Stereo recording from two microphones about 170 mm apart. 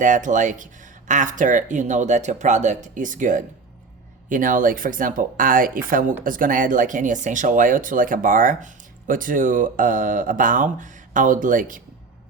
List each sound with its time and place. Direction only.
0.0 s speech: 50° right (ahead or behind)